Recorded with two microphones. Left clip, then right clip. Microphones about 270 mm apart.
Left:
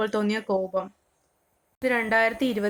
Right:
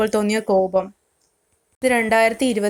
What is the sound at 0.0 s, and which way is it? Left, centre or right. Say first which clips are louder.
A woman's voice: right 7 dB; right.